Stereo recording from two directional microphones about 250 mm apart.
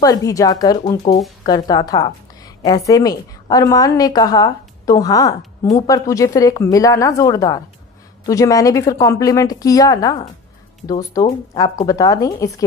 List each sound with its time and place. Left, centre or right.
0.0 s a woman's voice: centre